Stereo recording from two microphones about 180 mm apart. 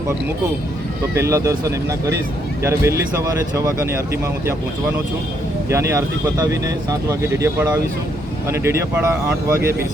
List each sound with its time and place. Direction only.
1.1 s speech: 15° right (ahead or behind)
5.6 s speech: 15° right (ahead or behind)